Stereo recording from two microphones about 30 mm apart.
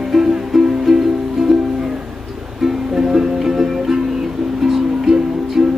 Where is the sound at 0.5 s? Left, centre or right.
Centre.